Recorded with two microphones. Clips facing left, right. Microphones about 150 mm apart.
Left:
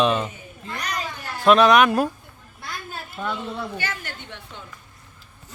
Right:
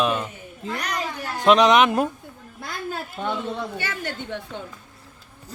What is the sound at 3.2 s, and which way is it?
Speech, 20° right (ahead or behind).